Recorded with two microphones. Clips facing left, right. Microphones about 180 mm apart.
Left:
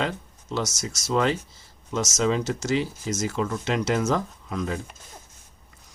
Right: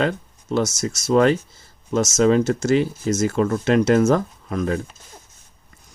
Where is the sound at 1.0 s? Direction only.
55° right (ahead or behind).